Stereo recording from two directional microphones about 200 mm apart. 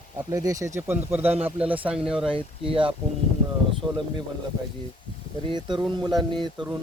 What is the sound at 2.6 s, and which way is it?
Speech, 25° right (ahead or behind).